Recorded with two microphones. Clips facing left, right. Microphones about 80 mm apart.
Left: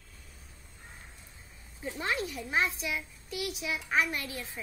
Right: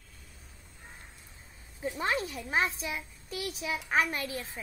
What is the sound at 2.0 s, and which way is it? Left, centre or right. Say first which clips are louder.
A child's voice: right 1 dB; right.